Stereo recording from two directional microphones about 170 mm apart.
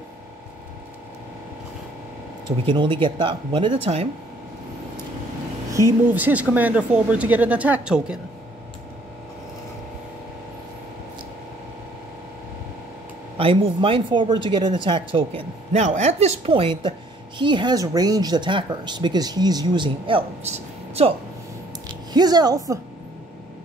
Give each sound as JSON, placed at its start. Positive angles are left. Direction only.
{"t": 2.6, "sound": "speech", "side_deg": -30}
{"t": 5.7, "sound": "a woman's voice", "side_deg": -15}
{"t": 13.4, "sound": "speech", "side_deg": -30}
{"t": 22.1, "sound": "speech", "side_deg": -25}